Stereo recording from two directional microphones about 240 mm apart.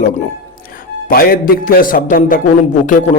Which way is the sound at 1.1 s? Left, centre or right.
Left.